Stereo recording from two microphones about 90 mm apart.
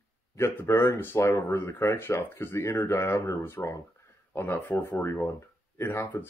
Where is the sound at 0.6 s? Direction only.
30° left (ahead or behind).